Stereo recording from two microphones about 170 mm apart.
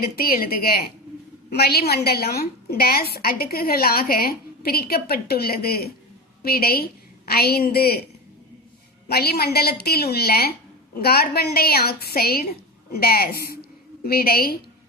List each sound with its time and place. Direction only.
0.0 s a woman's voice: 60° left (ahead or behind)
9.0 s a woman's voice: 70° left (ahead or behind)